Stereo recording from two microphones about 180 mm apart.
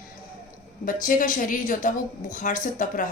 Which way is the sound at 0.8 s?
50° left (ahead or behind).